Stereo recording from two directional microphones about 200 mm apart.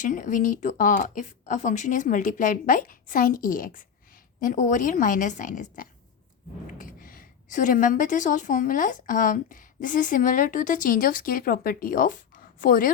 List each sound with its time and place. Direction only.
0.0 s a woman's voice: 40° left (ahead or behind)